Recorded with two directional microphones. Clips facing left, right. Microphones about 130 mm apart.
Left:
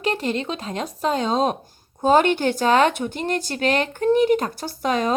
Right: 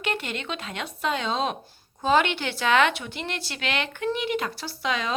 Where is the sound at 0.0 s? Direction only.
35° left (ahead or behind).